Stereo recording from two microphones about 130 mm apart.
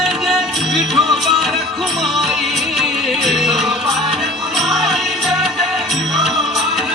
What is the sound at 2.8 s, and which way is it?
Music, centre (ahead or behind).